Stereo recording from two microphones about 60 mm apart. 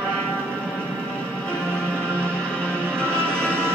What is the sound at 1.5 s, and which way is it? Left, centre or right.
Music, centre.